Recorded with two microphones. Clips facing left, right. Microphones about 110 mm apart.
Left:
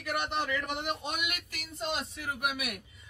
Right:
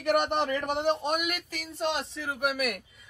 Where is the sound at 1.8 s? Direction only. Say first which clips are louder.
Right 5 dB; 75° right (ahead or behind).